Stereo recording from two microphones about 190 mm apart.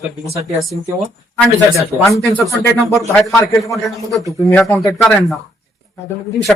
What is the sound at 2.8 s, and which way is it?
Speech, 15° right (ahead or behind).